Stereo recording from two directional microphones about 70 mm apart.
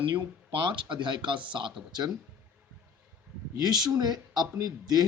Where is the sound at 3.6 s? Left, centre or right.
Right.